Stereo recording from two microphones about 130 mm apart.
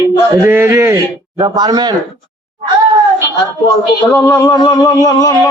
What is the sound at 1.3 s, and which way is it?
Speech, 35° right (ahead or behind).